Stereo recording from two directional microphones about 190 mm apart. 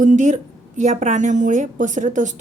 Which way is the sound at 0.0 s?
40° right (ahead or behind).